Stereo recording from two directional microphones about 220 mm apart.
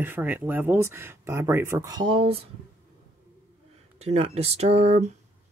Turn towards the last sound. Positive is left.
turn(degrees=-30)  # may be behind; listen again after turning